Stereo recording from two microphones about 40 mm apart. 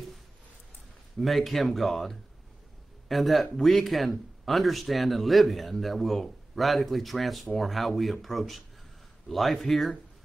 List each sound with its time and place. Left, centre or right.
1.1 s a man's voice: centre